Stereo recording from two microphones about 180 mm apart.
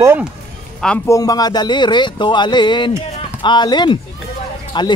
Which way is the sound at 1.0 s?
20° left (ahead or behind).